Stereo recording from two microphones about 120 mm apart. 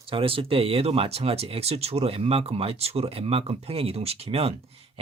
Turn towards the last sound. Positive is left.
turn(degrees=-55)  # may be behind; listen again after turning